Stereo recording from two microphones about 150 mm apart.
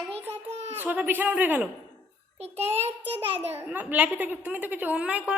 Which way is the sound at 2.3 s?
45° right (ahead or behind).